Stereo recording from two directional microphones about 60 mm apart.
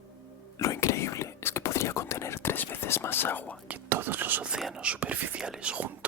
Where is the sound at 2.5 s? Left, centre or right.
Left.